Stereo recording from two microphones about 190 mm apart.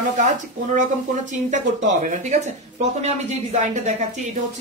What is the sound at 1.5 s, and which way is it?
Speech, 40° right (ahead or behind).